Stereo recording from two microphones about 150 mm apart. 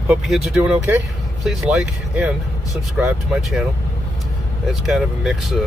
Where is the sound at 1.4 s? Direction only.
Centre (ahead or behind).